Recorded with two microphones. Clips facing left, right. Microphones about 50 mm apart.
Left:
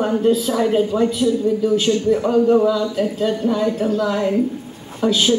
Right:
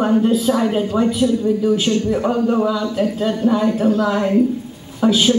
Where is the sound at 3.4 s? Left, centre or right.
Centre.